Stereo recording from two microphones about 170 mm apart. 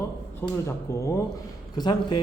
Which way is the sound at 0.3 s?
15° left (ahead or behind).